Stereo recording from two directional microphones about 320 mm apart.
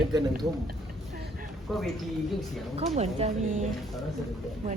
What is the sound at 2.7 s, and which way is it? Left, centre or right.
Speech, centre.